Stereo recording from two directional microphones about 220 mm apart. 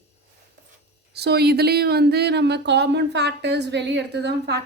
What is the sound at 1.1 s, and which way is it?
Speech, 45° right (ahead or behind).